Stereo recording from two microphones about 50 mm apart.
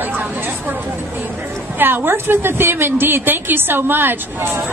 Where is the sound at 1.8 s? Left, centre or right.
Right.